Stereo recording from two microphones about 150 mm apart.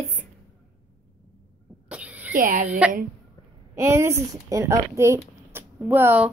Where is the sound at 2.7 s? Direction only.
5° right (ahead or behind).